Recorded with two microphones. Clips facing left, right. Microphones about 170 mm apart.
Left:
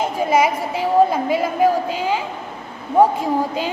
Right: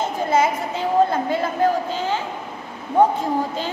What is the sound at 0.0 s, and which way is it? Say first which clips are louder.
A woman's voice: left 2 dB; 10° left (ahead or behind).